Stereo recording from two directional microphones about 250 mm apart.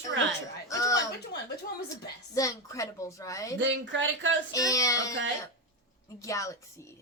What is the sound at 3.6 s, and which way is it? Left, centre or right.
Speech, right.